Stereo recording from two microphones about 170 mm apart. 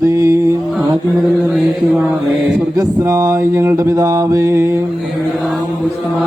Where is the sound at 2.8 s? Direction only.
20° right (ahead or behind).